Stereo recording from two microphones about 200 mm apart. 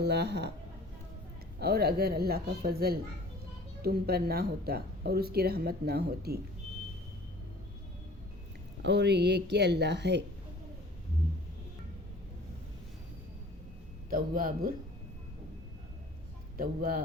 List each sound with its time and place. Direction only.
0.0 s a woman's voice: 55° right (ahead or behind)
1.5 s speech: 50° right (ahead or behind)
8.8 s a woman's voice: 60° right (ahead or behind)
14.1 s speech: 45° right (ahead or behind)
16.6 s speech: 45° right (ahead or behind)